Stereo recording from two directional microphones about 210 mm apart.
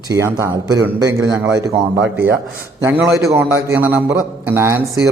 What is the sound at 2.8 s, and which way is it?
A man's voice, 10° right (ahead or behind).